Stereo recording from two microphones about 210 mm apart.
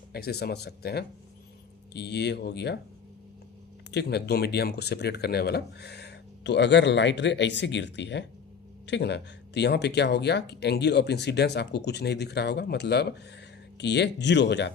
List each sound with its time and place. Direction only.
0.1 s speech: 50° left (ahead or behind)
3.9 s speech: 50° left (ahead or behind)